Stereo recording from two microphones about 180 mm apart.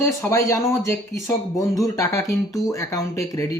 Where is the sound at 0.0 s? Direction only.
15° left (ahead or behind).